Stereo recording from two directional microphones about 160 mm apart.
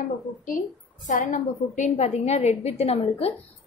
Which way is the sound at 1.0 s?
50° left (ahead or behind).